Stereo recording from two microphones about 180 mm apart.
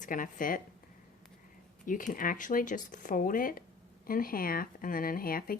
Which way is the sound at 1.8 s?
50° left (ahead or behind).